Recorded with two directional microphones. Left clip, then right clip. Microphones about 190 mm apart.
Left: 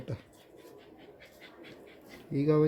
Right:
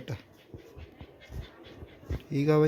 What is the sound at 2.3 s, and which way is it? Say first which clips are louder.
Speech: right 2 dB; centre (ahead or behind).